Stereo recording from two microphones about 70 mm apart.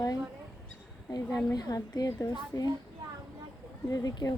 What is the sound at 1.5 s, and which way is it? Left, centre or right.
A woman's voice, left.